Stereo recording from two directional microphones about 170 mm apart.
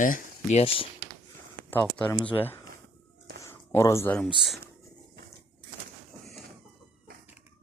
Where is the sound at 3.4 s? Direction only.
15° left (ahead or behind).